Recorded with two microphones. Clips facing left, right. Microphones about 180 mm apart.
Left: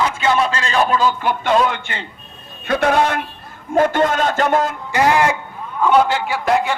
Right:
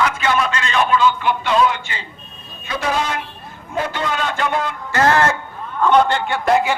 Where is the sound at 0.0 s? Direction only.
25° left (ahead or behind); by 2.0 s 55° left (ahead or behind).